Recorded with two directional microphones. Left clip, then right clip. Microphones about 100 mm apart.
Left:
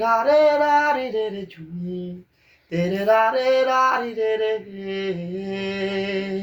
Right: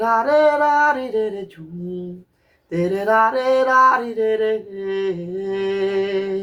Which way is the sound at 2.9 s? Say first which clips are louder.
Right 1 dB; 25° right (ahead or behind).